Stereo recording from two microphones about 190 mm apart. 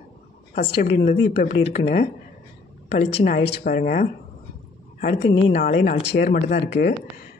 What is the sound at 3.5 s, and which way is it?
Speech, 50° left (ahead or behind).